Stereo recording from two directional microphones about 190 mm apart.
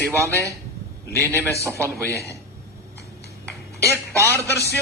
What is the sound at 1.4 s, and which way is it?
Speech, 15° right (ahead or behind).